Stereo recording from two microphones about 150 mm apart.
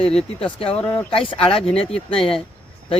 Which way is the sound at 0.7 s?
10° left (ahead or behind).